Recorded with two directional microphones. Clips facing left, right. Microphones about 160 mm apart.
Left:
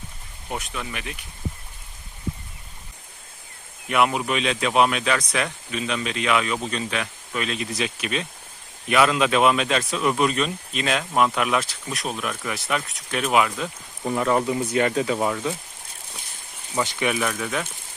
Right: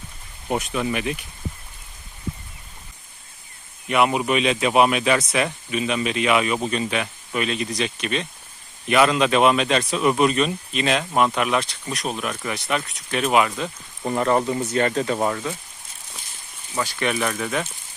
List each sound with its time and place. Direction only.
0.4 s speech: 15° right (ahead or behind)
3.8 s speech: centre (ahead or behind)
17.0 s speech: 5° left (ahead or behind)